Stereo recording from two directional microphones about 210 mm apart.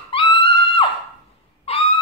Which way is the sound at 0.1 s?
25° left (ahead or behind).